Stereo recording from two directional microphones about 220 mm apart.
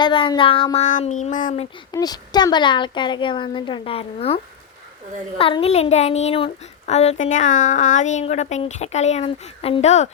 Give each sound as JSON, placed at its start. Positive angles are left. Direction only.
{"t": 0.0, "sound": "speech", "side_deg": 20}
{"t": 1.9, "sound": "speech", "side_deg": 15}
{"t": 5.4, "sound": "speech", "side_deg": 25}